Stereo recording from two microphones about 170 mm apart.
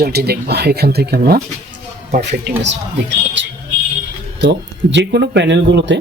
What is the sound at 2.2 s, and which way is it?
Speech, 90° right.